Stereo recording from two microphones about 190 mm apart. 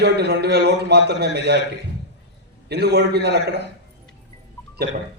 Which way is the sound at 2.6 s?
60° right (ahead or behind).